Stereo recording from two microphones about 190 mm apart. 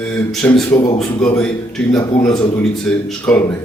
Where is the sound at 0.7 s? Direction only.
20° left (ahead or behind).